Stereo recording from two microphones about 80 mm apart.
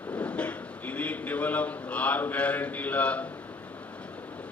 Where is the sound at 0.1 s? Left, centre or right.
Centre.